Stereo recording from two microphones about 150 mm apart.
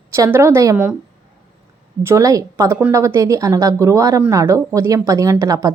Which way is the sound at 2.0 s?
20° right (ahead or behind).